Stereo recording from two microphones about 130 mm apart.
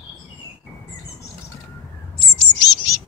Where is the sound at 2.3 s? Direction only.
35° left (ahead or behind).